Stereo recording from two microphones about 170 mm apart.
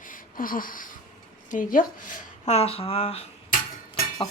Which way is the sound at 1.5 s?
50° left (ahead or behind).